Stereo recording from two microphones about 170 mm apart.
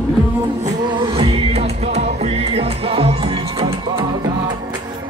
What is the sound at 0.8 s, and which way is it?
Music, 30° right (ahead or behind).